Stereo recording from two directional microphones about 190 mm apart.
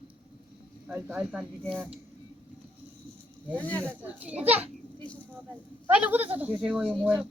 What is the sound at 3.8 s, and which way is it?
Speech, 10° right (ahead or behind).